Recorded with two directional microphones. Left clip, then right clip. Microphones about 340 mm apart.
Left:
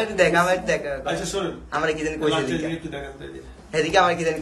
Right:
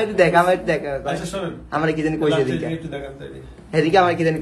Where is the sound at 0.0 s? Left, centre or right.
Centre.